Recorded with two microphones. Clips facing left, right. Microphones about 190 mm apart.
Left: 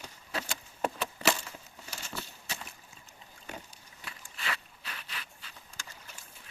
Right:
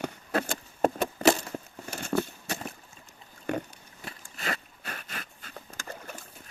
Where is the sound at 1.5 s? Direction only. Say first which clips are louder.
Right 10 dB; 55° right (ahead or behind).